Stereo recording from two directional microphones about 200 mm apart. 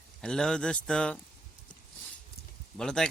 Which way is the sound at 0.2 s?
5° left (ahead or behind).